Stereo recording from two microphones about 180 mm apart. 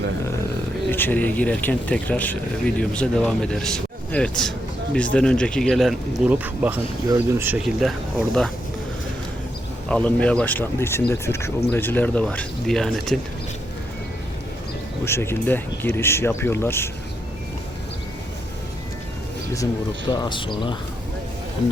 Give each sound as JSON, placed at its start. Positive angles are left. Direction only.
{"t": 0.9, "sound": "speech", "side_deg": 10}
{"t": 9.9, "sound": "speech", "side_deg": 5}
{"t": 15.0, "sound": "speech", "side_deg": 15}
{"t": 20.1, "sound": "speech", "side_deg": 25}